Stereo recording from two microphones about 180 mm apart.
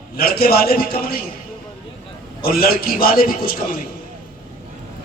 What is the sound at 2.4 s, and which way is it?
A man's voice, 55° left (ahead or behind).